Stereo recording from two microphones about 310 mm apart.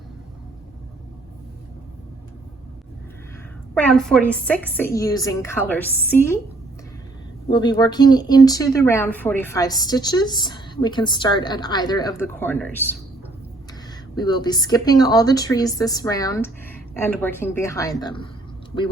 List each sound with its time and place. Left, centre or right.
3.8 s a woman's voice: centre
7.5 s a woman's voice: centre
14.2 s a woman's voice: centre